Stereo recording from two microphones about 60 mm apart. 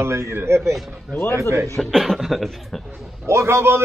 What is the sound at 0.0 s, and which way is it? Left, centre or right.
Speech, right.